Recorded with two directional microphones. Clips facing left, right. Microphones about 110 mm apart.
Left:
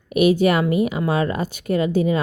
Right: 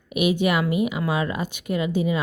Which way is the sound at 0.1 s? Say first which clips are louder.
Left 5 dB; 45° left (ahead or behind).